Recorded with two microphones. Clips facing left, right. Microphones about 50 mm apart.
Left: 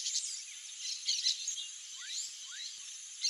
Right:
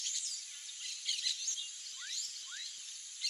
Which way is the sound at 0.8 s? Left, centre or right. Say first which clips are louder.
Left 2 dB; centre.